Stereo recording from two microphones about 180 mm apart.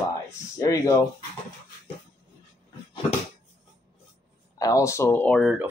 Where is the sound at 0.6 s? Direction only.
20° left (ahead or behind).